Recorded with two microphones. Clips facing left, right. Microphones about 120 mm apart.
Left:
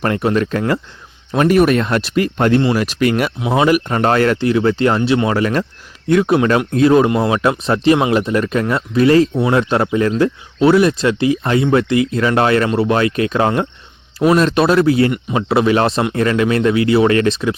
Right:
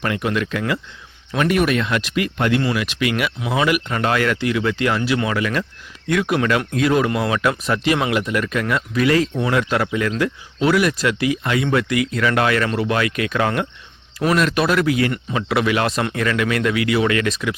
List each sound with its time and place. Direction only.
0.0 s speech: 35° left (ahead or behind)
3.4 s speech: 30° left (ahead or behind)